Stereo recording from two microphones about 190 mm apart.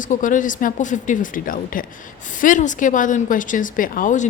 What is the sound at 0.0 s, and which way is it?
Speech, 45° left (ahead or behind).